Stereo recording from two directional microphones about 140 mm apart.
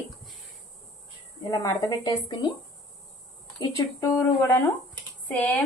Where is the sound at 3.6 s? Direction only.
25° left (ahead or behind).